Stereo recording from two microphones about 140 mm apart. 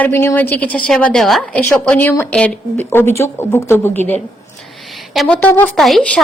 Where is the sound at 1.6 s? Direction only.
15° left (ahead or behind).